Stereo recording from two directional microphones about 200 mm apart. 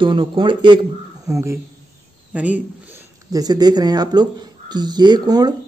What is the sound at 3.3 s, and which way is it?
Speech, 20° right (ahead or behind).